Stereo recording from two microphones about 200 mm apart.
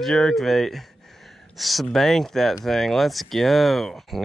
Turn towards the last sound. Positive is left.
turn(degrees=0)  # may be behind; listen again after turning